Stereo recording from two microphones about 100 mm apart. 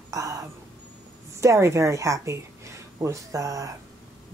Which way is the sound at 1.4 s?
30° right (ahead or behind).